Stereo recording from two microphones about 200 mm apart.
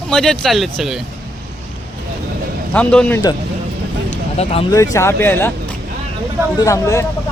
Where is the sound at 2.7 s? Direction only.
5° left (ahead or behind).